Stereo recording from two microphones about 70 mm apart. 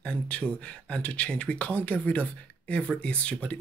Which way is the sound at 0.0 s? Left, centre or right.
Centre.